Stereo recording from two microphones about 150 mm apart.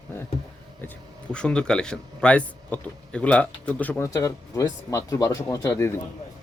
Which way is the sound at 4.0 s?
20° left (ahead or behind).